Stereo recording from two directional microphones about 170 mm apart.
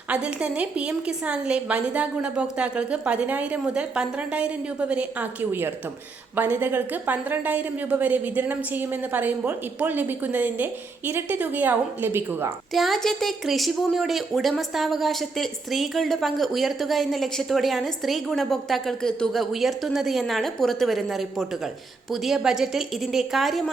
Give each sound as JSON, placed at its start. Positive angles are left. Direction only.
{"t": 0.1, "sound": "a woman's voice", "side_deg": -5}
{"t": 12.7, "sound": "a woman's voice", "side_deg": 0}